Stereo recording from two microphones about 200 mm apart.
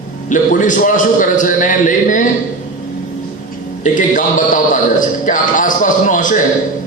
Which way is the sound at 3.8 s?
40° left (ahead or behind).